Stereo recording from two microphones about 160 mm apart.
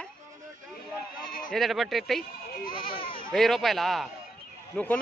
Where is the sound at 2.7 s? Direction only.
35° left (ahead or behind).